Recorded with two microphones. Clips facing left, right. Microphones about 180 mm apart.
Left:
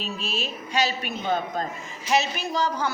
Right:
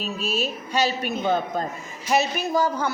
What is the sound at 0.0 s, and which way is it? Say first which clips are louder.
A woman's voice: right 4 dB; 40° right (ahead or behind).